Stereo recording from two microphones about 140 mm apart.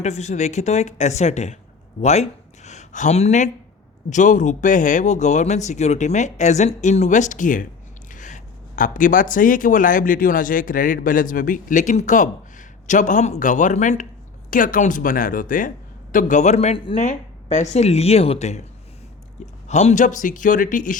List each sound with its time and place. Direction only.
0.0 s speech: 55° left (ahead or behind); by 7.7 s 70° left (ahead or behind)
8.1 s a sound: 65° left (ahead or behind)
9.3 s speech: 75° left (ahead or behind)
14.5 s speech: 75° left (ahead or behind)
16.1 s speech: 60° left (ahead or behind); by 16.9 s 45° left (ahead or behind)
16.9 s speech: 60° left (ahead or behind)
19.6 s speech: 55° left (ahead or behind)